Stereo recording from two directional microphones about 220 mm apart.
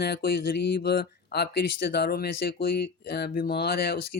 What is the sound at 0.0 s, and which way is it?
Speech, 45° left (ahead or behind).